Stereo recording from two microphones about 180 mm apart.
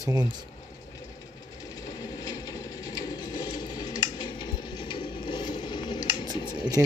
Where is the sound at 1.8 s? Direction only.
20° left (ahead or behind).